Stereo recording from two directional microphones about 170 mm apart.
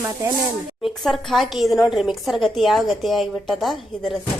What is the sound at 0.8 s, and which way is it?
A woman's voice, centre (ahead or behind).